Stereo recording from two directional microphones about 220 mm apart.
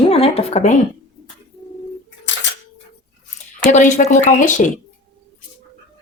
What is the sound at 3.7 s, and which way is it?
Speech, 35° left (ahead or behind).